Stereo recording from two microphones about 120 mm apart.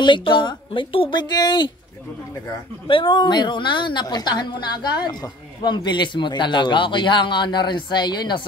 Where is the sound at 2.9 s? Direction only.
40° left (ahead or behind).